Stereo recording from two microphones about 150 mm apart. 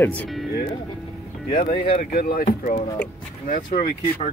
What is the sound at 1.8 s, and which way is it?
Speech, 70° left (ahead or behind).